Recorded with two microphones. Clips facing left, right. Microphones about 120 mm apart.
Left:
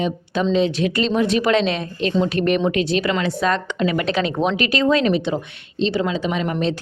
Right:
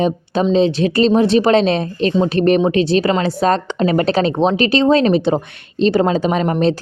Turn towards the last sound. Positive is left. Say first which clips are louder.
# right 6 dB
turn(degrees=-40)  # may be behind; listen again after turning